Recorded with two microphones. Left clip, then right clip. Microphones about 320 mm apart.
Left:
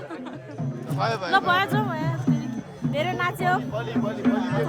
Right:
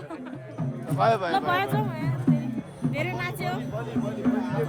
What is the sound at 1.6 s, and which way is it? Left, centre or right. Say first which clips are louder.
Speech: left 3 dB; centre.